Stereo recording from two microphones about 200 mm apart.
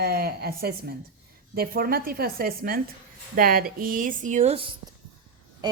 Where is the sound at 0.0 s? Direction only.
50° right (ahead or behind); by 4.7 s 30° right (ahead or behind).